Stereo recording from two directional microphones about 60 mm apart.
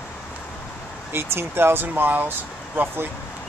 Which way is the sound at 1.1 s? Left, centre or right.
Right.